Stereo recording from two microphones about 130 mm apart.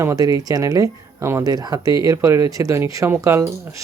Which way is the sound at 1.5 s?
30° right (ahead or behind).